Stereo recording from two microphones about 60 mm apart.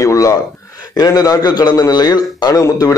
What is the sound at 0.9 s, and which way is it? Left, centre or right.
A man's voice, left.